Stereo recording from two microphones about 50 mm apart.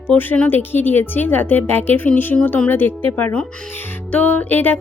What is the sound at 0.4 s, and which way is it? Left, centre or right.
Speech, left.